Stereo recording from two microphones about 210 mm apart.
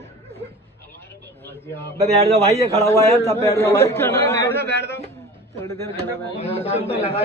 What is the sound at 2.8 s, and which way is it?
A man's voice, 15° left (ahead or behind).